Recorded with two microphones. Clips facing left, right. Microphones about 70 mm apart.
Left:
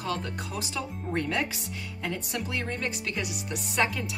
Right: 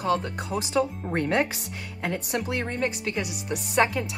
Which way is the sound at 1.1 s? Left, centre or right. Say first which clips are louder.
Right 5 dB; right.